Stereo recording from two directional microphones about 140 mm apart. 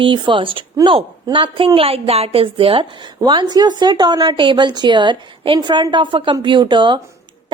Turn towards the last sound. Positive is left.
turn(degrees=-35)  # may be behind; listen again after turning